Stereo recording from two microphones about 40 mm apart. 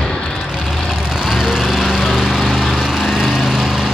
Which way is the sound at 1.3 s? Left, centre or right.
Centre.